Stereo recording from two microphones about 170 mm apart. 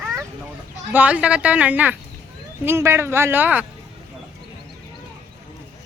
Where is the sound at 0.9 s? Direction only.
10° right (ahead or behind).